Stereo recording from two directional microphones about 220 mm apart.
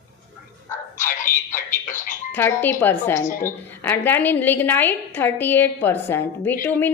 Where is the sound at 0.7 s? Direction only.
35° left (ahead or behind).